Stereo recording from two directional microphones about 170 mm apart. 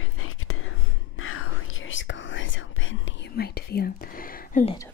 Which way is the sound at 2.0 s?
90° left.